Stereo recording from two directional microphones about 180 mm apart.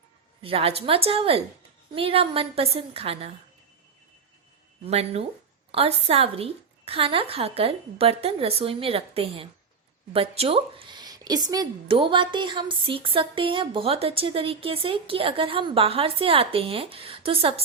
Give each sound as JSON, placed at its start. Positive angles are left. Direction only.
{"t": 0.4, "sound": "a woman's voice", "side_deg": -30}
{"t": 4.9, "sound": "a woman's voice", "side_deg": -35}